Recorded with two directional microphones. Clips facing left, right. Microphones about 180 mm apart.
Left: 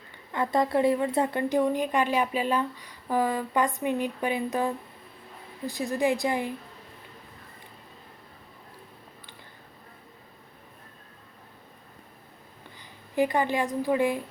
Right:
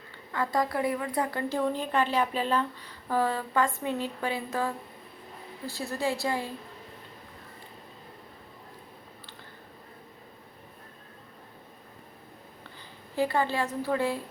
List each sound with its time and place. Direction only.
0.3 s a woman's voice: 25° left (ahead or behind)
13.1 s a woman's voice: 15° left (ahead or behind)